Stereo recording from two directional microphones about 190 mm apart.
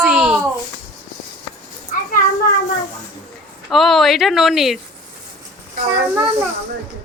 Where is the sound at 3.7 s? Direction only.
Centre (ahead or behind).